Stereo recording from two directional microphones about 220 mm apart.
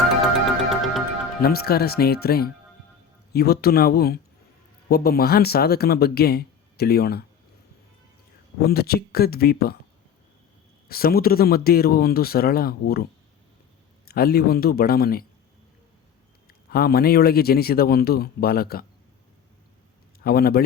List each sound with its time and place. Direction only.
0.7 s music: centre (ahead or behind)
1.4 s speech: 45° left (ahead or behind)
8.6 s speech: 45° left (ahead or behind)
10.8 s speech: 45° left (ahead or behind)
14.1 s speech: 45° left (ahead or behind)
16.5 s speech: 45° left (ahead or behind)
20.2 s speech: 45° left (ahead or behind)